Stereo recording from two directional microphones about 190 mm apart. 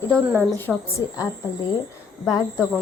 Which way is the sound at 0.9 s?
15° left (ahead or behind).